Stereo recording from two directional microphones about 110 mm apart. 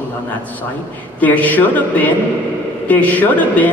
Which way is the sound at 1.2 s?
15° left (ahead or behind).